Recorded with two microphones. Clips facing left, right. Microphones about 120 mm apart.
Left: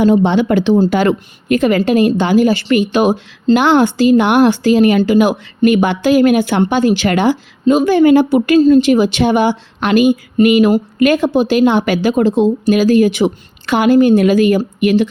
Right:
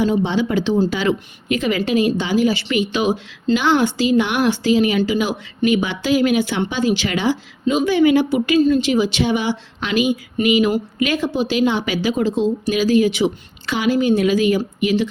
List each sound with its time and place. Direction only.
0.0 s a woman's voice: 60° left (ahead or behind)